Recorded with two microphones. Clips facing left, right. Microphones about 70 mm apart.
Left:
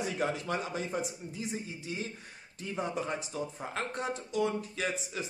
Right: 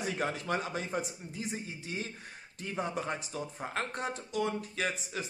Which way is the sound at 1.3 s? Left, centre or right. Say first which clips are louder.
Left 1 dB; right.